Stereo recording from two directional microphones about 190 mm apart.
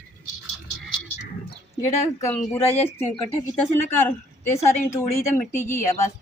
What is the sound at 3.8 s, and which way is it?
A woman's voice, 10° left (ahead or behind).